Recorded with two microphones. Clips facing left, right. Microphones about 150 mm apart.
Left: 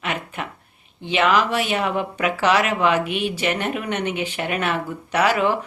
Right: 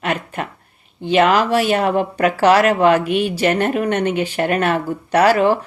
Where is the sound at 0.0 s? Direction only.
45° right (ahead or behind).